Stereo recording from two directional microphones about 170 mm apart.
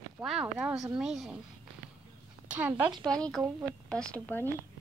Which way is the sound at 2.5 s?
10° right (ahead or behind).